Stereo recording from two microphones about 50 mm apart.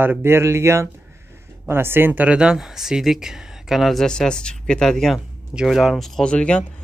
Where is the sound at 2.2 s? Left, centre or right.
Centre.